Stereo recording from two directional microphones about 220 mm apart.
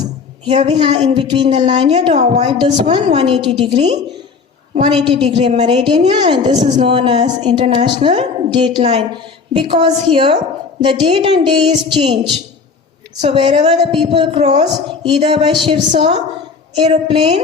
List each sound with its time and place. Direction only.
0.4 s a woman's voice: 25° right (ahead or behind)
13.2 s a woman's voice: 25° right (ahead or behind)